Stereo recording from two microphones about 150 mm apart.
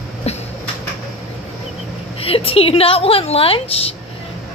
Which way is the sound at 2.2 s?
40° left (ahead or behind).